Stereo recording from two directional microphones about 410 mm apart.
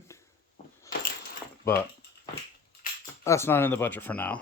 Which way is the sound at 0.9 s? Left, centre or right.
Centre.